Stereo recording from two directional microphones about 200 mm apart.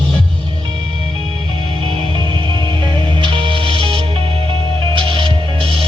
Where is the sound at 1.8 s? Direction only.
25° right (ahead or behind).